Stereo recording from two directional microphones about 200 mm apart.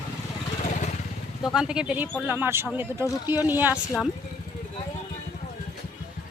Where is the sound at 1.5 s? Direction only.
5° right (ahead or behind).